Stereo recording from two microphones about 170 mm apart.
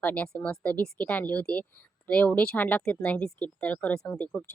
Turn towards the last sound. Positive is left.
turn(degrees=10)  # may be behind; listen again after turning